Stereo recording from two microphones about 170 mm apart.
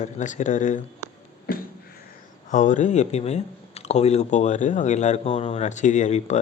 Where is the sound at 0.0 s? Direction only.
45° left (ahead or behind).